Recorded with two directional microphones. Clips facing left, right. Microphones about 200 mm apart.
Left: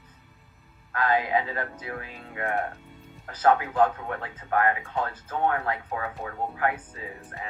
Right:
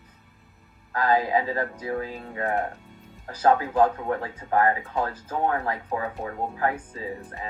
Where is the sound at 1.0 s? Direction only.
35° right (ahead or behind).